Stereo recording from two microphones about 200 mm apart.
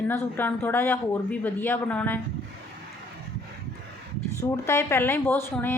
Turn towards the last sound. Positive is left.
turn(degrees=10)  # may be behind; listen again after turning